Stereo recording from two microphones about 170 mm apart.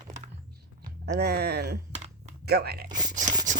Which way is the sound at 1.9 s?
40° right (ahead or behind).